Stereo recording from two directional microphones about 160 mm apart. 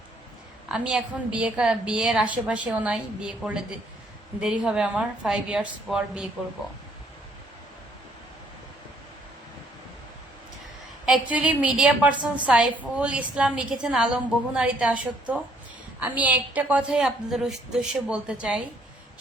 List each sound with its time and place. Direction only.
0.7 s a woman's voice: 5° right (ahead or behind)
11.0 s a woman's voice: 5° right (ahead or behind)